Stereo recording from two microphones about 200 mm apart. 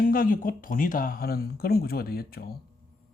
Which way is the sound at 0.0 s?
45° left (ahead or behind).